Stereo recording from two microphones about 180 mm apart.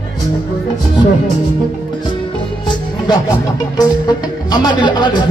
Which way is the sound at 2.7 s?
20° left (ahead or behind).